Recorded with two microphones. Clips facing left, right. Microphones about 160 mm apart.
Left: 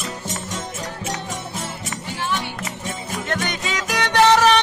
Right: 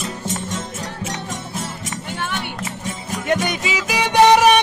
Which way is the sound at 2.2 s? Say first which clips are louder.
Left 2 dB; 55° right (ahead or behind).